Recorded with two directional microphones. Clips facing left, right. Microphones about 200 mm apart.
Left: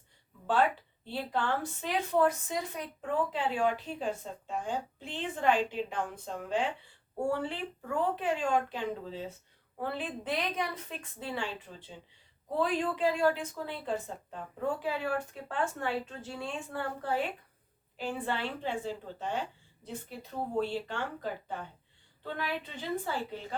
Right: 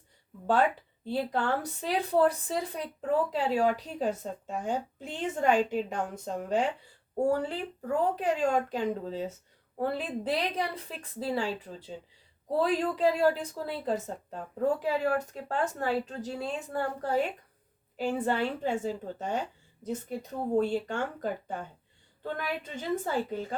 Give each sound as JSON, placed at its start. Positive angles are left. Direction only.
{"t": 1.0, "sound": "a woman's voice", "side_deg": -40}